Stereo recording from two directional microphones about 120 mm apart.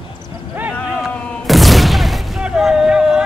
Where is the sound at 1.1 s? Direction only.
10° left (ahead or behind).